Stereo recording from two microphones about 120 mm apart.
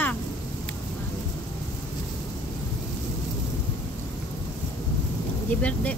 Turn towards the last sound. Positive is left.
turn(degrees=10)  # may be behind; listen again after turning